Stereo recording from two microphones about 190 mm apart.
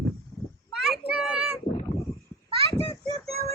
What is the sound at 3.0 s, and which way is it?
Music, 30° right (ahead or behind).